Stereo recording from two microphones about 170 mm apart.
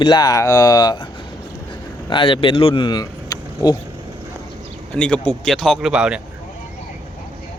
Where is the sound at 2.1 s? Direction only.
30° left (ahead or behind).